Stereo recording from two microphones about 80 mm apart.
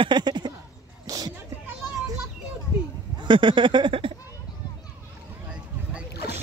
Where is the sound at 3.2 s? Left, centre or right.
Right.